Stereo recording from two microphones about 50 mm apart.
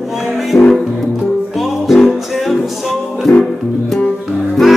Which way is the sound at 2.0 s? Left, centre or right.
Centre.